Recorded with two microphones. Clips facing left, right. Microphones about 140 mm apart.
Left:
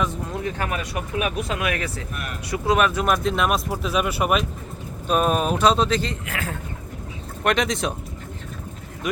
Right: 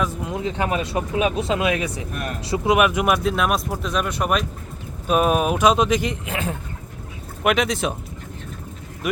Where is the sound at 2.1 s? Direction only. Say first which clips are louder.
Right 4 dB; 35° right (ahead or behind).